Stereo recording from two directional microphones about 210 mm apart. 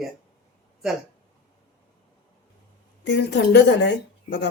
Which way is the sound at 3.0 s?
55° left (ahead or behind).